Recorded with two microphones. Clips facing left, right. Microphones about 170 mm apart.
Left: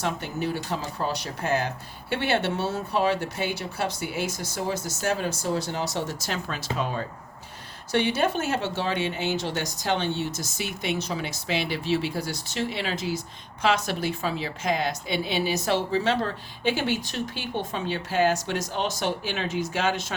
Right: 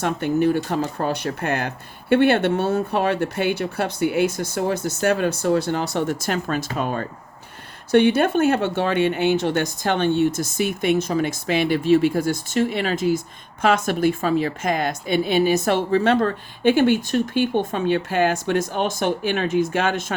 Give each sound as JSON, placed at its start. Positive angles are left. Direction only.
{"t": 0.0, "sound": "speech", "side_deg": -55}